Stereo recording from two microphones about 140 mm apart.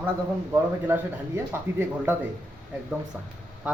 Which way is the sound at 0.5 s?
15° right (ahead or behind).